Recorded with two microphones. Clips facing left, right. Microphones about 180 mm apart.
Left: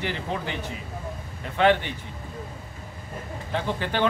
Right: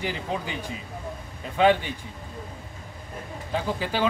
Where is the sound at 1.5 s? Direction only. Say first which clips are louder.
Even; 10° right (ahead or behind).